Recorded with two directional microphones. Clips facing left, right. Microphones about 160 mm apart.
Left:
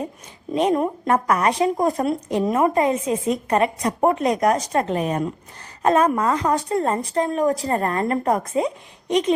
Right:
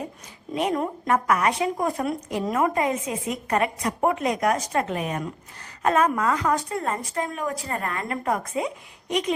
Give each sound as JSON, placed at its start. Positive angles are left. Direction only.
{"t": 0.5, "sound": "speech", "side_deg": 25}